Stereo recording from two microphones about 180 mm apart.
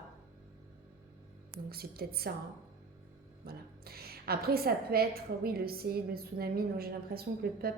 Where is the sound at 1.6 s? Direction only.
60° right (ahead or behind).